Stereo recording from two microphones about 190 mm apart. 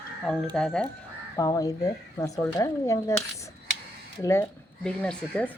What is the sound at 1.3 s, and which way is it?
Speech, 15° left (ahead or behind).